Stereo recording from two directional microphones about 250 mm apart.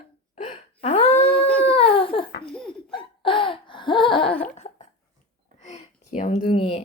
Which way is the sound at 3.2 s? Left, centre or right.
Centre.